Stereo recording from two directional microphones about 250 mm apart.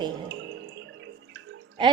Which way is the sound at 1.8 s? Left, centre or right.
Centre.